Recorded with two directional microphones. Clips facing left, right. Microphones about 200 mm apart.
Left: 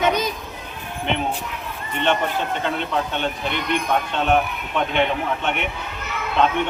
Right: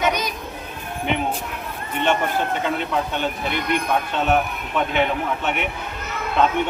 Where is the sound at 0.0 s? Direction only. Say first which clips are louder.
Left 2 dB; 25° left (ahead or behind).